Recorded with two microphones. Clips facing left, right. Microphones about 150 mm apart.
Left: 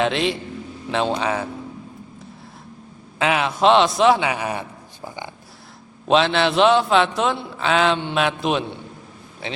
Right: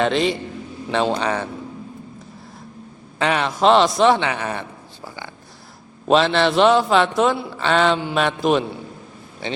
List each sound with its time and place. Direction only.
0.0 s a man's voice: centre (ahead or behind)
3.2 s a man's voice: 5° left (ahead or behind)
6.1 s a man's voice: centre (ahead or behind)